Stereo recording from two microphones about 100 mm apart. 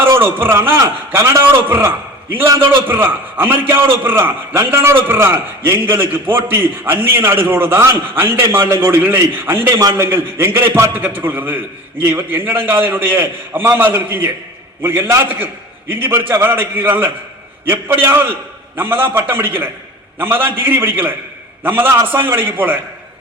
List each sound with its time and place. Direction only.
0.0 s a man's voice: 25° right (ahead or behind)